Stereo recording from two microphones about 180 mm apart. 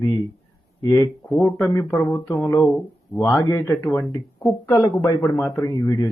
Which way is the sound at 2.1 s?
10° left (ahead or behind).